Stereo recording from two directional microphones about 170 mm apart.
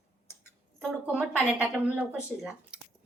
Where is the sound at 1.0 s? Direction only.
10° right (ahead or behind).